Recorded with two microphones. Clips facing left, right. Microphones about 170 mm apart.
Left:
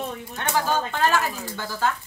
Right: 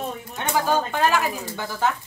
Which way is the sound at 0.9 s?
15° right (ahead or behind).